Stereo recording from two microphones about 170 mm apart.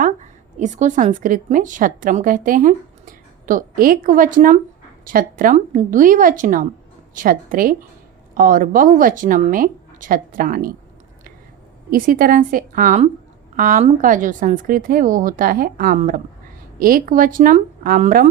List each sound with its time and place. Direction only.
0.0 s a woman's voice: 45° right (ahead or behind)
11.9 s a woman's voice: 55° right (ahead or behind)